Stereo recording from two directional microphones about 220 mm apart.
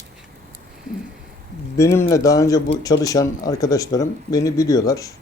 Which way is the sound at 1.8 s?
15° left (ahead or behind).